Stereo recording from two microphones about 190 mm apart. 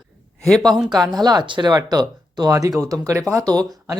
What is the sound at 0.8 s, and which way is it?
Speech, 20° right (ahead or behind).